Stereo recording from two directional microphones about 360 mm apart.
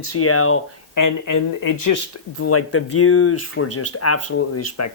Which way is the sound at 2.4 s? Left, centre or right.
Left.